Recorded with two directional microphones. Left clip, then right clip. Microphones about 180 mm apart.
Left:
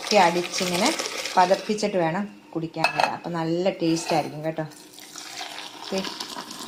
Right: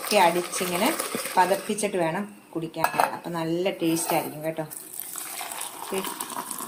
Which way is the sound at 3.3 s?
30° left (ahead or behind).